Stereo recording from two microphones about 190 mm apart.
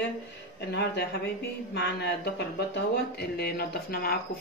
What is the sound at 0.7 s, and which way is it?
Speech, 60° left (ahead or behind).